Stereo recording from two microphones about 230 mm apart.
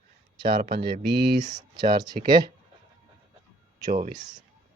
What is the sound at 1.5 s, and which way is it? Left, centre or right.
Speech, centre.